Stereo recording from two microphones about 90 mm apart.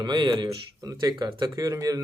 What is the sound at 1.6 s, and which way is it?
Speech, 40° right (ahead or behind).